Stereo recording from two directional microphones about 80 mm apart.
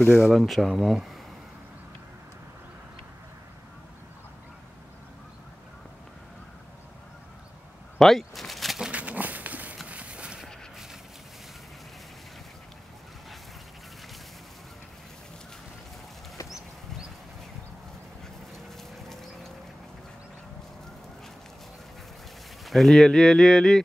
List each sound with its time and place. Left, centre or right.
0.2 s speech: centre
8.0 s speech: centre
8.7 s a sound: centre
18.8 s dog: centre
22.7 s speech: centre